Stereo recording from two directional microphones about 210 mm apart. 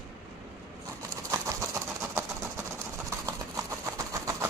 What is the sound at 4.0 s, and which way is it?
Vehicle, 15° right (ahead or behind).